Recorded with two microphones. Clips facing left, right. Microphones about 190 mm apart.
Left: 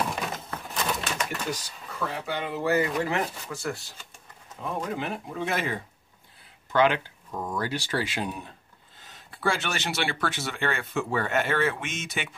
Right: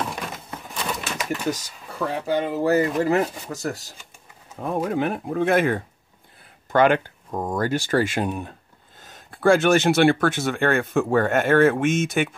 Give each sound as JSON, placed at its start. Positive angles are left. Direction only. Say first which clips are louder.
{"t": 0.1, "sound": "a sound", "louder": "even", "side_deg": 0}
{"t": 0.8, "sound": "pigeon", "louder": "right 1 dB", "side_deg": -5}
{"t": 1.5, "sound": "speech", "louder": "right 5 dB", "side_deg": -45}
{"t": 4.6, "sound": "speech", "louder": "right 7 dB", "side_deg": -50}